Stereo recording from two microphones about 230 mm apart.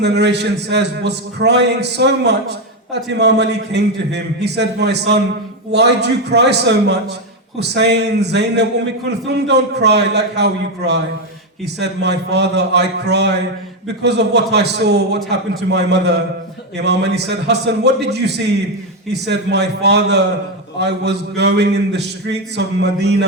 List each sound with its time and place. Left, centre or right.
0.0 s a man's voice: right